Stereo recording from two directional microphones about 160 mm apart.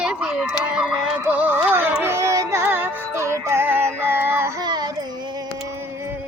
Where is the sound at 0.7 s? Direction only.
5° right (ahead or behind).